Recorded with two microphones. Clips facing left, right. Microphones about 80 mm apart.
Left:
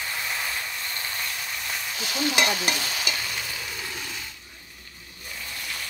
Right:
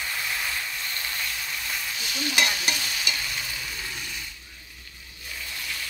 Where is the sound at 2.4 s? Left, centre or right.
Left.